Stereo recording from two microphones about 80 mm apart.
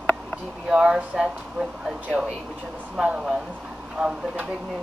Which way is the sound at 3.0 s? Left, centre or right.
Centre.